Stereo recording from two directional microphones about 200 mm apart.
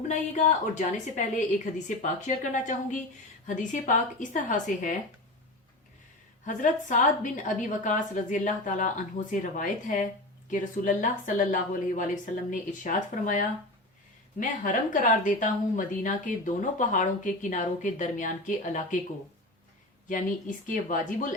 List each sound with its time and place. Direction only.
0.1 s speech: 35° left (ahead or behind)
6.4 s speech: 40° left (ahead or behind)
20.7 s speech: 40° left (ahead or behind)